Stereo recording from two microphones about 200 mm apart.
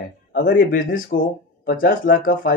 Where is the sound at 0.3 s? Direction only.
45° left (ahead or behind).